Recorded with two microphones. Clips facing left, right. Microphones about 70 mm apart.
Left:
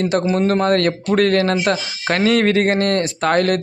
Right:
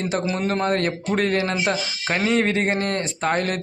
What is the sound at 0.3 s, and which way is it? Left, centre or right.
Speech, left.